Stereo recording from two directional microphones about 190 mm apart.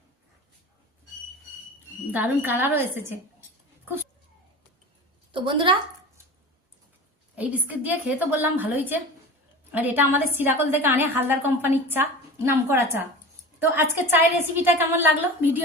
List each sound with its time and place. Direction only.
2.1 s a woman's voice: 10° right (ahead or behind)
5.3 s a woman's voice: 25° right (ahead or behind)
7.3 s a woman's voice: 10° right (ahead or behind)